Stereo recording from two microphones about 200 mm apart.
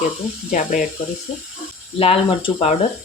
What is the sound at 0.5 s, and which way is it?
Speech, 40° left (ahead or behind).